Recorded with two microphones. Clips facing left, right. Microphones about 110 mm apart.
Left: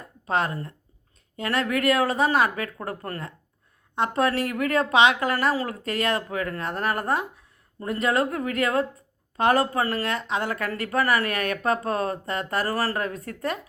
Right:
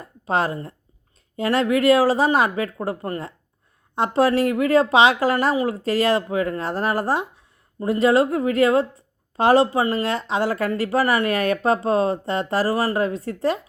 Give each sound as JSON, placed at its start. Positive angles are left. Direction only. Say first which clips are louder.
{"t": 0.3, "sound": "speech", "louder": "right 3 dB", "side_deg": -30}
{"t": 3.9, "sound": "speech", "louder": "right 5 dB", "side_deg": -30}